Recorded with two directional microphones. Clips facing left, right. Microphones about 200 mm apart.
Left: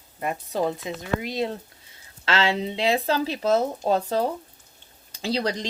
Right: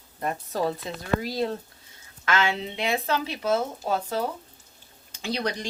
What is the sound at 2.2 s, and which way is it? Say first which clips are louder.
Speech: left 2 dB; 35° left (ahead or behind).